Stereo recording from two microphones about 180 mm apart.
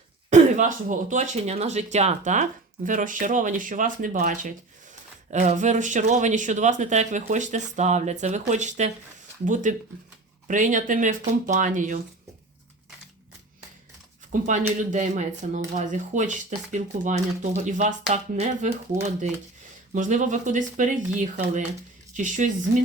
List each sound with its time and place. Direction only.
0.3 s speech: 40° right (ahead or behind)
14.8 s speech: 45° right (ahead or behind)
18.9 s speech: 15° right (ahead or behind)
19.9 s speech: 45° right (ahead or behind)